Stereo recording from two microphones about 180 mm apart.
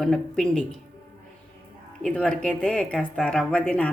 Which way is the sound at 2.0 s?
5° left (ahead or behind).